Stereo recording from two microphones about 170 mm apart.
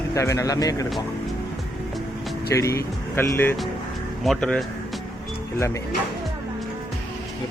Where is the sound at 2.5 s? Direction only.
15° left (ahead or behind).